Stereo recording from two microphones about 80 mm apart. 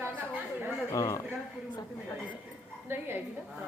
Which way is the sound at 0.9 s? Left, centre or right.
Left.